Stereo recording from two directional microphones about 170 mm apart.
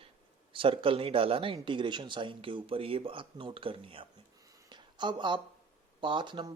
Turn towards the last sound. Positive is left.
turn(degrees=-30)  # may be behind; listen again after turning